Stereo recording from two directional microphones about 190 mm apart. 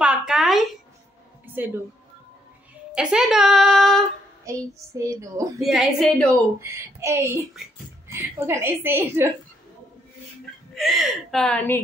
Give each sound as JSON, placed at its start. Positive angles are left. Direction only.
{"t": 0.0, "sound": "a sound", "side_deg": -5}
{"t": 2.9, "sound": "speech", "side_deg": -5}
{"t": 4.5, "sound": "a woman's voice", "side_deg": -15}
{"t": 5.6, "sound": "speech", "side_deg": 0}
{"t": 6.6, "sound": "a woman's voice", "side_deg": -15}
{"t": 10.7, "sound": "speech", "side_deg": 0}